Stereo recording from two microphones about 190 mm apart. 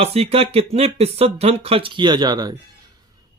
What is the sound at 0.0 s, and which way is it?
Speech, 30° right (ahead or behind).